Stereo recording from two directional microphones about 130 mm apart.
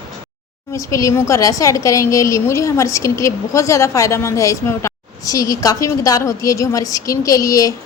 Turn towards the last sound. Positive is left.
turn(degrees=25)  # may be behind; listen again after turning